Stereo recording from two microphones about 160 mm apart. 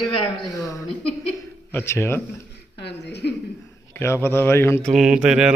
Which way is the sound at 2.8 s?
90° left.